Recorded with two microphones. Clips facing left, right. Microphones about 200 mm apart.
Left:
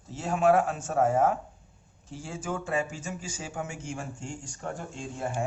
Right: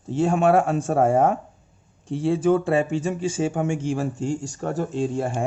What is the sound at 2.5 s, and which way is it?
Speech, 90° right.